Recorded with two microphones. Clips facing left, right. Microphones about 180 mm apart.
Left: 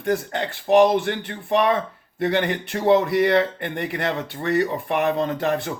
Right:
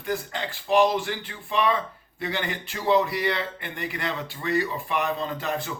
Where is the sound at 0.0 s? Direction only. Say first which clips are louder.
Left 6 dB; 55° left (ahead or behind).